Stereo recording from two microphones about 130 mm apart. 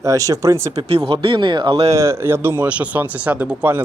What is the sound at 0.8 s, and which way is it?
Speech, 45° right (ahead or behind).